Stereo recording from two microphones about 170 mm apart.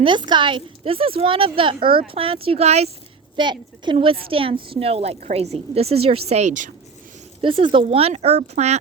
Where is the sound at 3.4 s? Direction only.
25° right (ahead or behind); by 6.7 s 45° right (ahead or behind).